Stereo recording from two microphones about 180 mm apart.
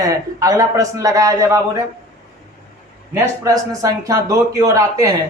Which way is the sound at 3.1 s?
20° right (ahead or behind).